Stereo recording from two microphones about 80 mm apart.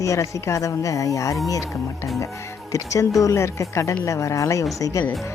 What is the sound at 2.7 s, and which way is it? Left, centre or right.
Speech, left.